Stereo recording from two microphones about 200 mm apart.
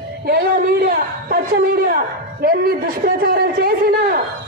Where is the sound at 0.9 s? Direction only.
45° right (ahead or behind).